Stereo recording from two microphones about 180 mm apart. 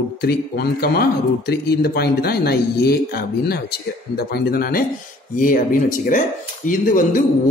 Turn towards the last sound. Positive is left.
turn(degrees=45)  # may be behind; listen again after turning